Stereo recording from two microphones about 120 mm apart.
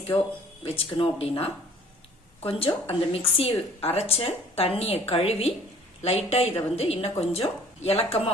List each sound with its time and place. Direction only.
0.1 s speech: 20° left (ahead or behind)
0.6 s a woman's voice: 50° left (ahead or behind)